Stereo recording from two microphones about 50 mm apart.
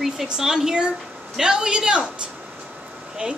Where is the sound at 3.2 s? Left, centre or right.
Right.